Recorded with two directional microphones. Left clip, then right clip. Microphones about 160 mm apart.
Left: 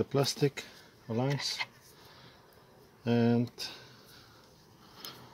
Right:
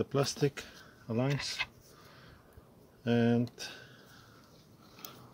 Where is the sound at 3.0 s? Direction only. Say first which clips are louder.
Left 1 dB; 30° left (ahead or behind).